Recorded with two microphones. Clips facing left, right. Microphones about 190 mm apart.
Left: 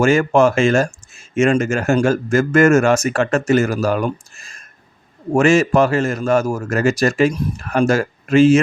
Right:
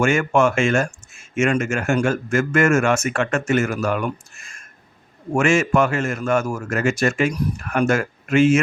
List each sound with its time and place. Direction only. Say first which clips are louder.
0.0 s speech: left 4 dB; 35° left (ahead or behind)